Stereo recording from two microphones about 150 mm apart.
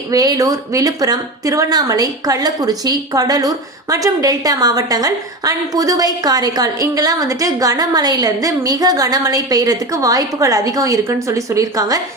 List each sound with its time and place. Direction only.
0.1 s speech: 25° right (ahead or behind)